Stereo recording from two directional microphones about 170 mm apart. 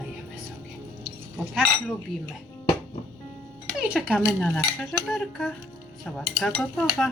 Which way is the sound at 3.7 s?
5° right (ahead or behind).